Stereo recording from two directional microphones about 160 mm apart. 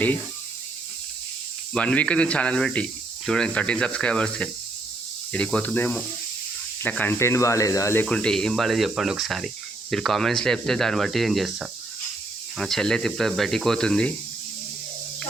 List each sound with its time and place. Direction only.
1.7 s speech: 5° left (ahead or behind)
8.0 s speech: 5° left (ahead or behind)